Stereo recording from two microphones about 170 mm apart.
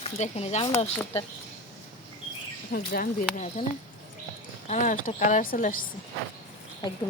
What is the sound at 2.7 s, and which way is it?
Speech, 60° left (ahead or behind).